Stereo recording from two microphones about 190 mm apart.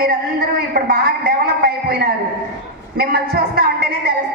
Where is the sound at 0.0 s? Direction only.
55° right (ahead or behind).